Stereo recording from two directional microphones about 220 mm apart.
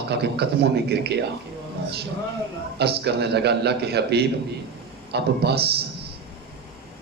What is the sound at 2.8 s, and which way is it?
A man's voice, 50° right (ahead or behind).